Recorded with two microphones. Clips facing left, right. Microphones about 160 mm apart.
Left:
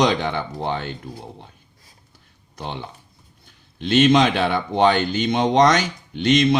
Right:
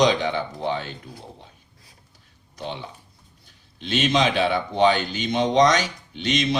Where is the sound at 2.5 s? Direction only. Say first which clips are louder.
Left 1 dB; 55° left (ahead or behind).